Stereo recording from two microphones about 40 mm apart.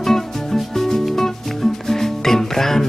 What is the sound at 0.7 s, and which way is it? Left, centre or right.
Music, centre.